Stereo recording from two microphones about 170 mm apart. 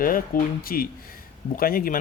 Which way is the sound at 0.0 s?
55° left (ahead or behind).